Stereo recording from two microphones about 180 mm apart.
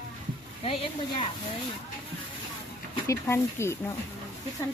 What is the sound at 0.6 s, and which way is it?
Speech, 30° left (ahead or behind).